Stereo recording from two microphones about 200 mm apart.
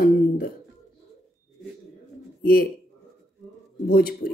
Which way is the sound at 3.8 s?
50° left (ahead or behind).